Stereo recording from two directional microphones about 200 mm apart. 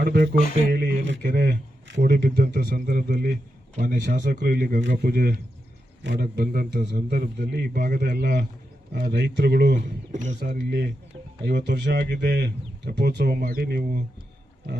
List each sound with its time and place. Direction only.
0.0 s a sound: 50° right (ahead or behind)
0.7 s speech: 50° right (ahead or behind)
6.0 s a man's voice: 65° right (ahead or behind)
6.2 s speech: 45° right (ahead or behind)
11.4 s speech: 55° right (ahead or behind)